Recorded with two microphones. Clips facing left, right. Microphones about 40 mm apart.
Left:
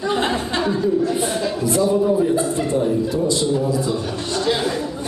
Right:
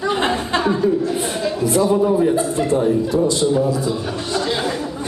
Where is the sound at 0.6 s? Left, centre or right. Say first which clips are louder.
Right 3 dB; centre.